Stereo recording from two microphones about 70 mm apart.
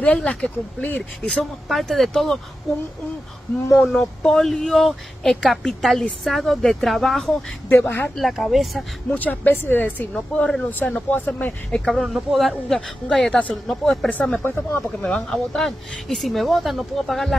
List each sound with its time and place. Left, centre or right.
0.0 s speech: centre
1.3 s speech: centre
3.7 s speech: centre
7.7 s speech: left
8.2 s speech: centre
9.1 s speech: left
10.1 s speech: centre
10.7 s speech: left
11.9 s speech: centre
14.4 s speech: left
15.0 s speech: centre